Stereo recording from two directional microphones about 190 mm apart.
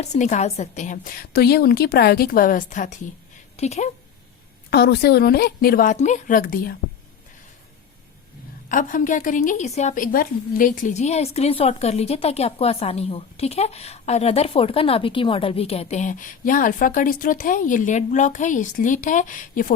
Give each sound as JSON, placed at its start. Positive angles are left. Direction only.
{"t": 0.0, "sound": "a woman's voice", "side_deg": 40}
{"t": 4.7, "sound": "a woman's voice", "side_deg": 55}
{"t": 8.7, "sound": "a woman's voice", "side_deg": 45}